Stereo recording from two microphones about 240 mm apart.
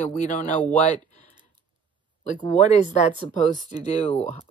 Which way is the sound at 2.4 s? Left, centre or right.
Left.